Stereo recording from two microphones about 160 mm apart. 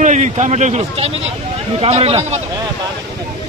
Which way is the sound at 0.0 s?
50° right (ahead or behind).